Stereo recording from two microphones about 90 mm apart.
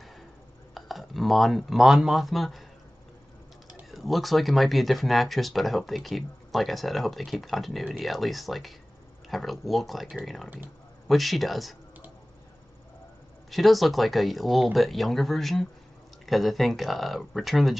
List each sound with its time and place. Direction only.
0.7 s speech: centre (ahead or behind)
3.9 s speech: centre (ahead or behind)
13.5 s speech: centre (ahead or behind)